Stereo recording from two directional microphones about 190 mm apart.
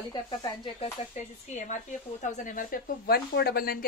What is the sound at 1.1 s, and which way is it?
Speech, 40° left (ahead or behind).